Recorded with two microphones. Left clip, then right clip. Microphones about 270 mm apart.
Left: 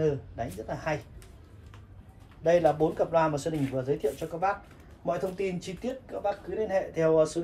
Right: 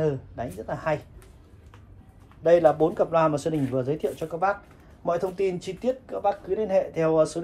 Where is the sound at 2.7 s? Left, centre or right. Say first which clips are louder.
Right 3 dB; centre.